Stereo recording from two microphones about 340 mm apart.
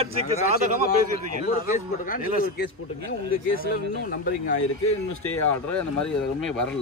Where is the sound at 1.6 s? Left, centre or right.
Left.